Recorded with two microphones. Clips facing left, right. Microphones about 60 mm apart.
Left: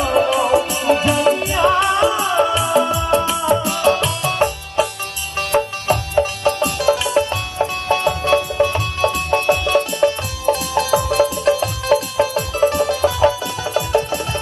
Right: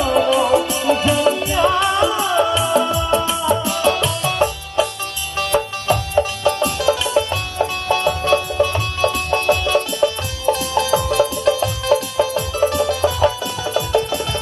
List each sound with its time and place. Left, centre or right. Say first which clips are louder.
0.0 s music: even; left